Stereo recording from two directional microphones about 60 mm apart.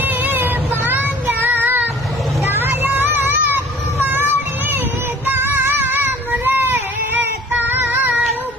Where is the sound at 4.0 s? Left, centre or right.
Right.